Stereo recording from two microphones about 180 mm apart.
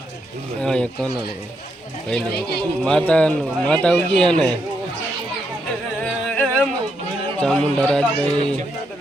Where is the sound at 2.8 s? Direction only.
5° left (ahead or behind).